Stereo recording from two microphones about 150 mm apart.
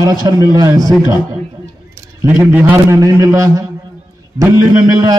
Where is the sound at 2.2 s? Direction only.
15° right (ahead or behind).